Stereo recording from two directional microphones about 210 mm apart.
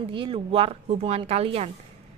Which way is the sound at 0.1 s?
25° right (ahead or behind).